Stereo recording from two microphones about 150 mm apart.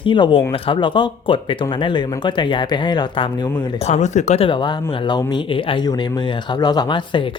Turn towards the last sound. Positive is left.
turn(degrees=30)  # may be behind; listen again after turning